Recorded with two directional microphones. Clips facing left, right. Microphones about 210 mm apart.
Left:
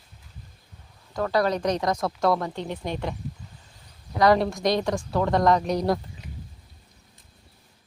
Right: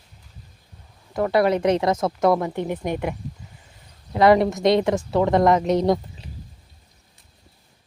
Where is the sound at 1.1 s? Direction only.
20° right (ahead or behind).